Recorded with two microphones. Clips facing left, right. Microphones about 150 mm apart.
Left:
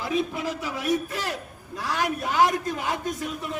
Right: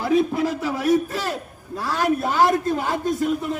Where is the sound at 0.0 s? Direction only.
45° right (ahead or behind).